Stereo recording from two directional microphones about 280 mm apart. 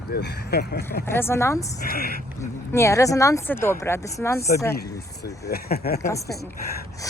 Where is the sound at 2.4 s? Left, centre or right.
Centre.